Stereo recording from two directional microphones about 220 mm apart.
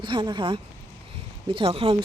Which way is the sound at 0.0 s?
20° right (ahead or behind).